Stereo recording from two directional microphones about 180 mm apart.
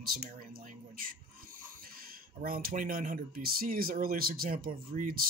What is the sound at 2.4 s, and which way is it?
Speech, 55° right (ahead or behind).